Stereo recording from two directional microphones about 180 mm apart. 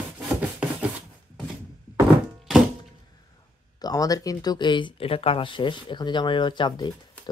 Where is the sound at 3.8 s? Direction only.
20° left (ahead or behind).